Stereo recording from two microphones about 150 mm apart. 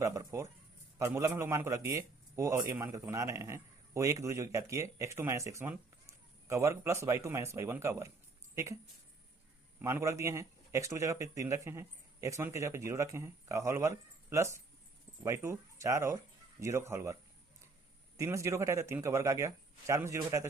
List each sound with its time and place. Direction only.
0.0 s a man's voice: 20° right (ahead or behind)
9.8 s a man's voice: 20° right (ahead or behind)
18.2 s a man's voice: 20° right (ahead or behind)